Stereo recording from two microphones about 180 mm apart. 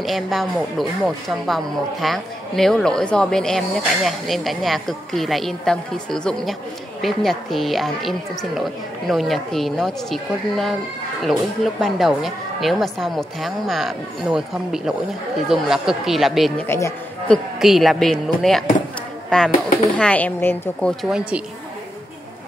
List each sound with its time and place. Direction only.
0.0 s speech: centre (ahead or behind)
16.6 s a man's voice: 15° left (ahead or behind)
17.6 s a woman's voice: centre (ahead or behind)